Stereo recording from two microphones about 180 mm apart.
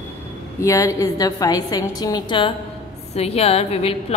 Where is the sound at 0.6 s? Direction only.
15° left (ahead or behind).